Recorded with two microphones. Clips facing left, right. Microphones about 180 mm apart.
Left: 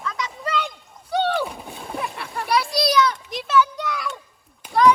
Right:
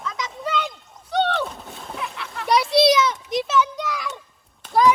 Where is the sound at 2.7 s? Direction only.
25° right (ahead or behind).